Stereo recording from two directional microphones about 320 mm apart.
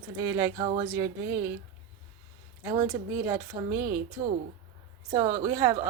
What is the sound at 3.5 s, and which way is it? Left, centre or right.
Speech, centre.